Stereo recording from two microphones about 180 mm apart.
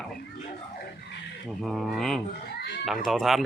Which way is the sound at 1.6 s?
Centre (ahead or behind).